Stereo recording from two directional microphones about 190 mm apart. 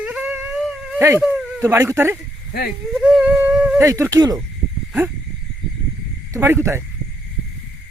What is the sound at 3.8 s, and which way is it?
Speech, 15° right (ahead or behind).